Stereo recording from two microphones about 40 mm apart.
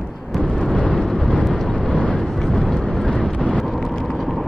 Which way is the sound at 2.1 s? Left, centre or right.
Centre.